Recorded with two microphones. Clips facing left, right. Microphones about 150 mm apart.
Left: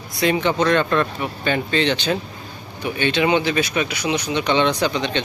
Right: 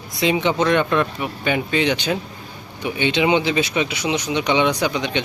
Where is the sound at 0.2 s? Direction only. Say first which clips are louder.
Even; 15° right (ahead or behind).